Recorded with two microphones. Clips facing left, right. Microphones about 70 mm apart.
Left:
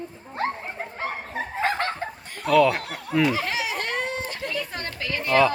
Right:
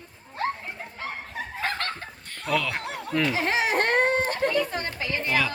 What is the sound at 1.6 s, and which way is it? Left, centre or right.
Snicker, left.